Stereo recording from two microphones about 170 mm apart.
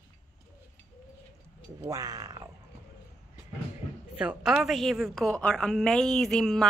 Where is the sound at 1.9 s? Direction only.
20° right (ahead or behind).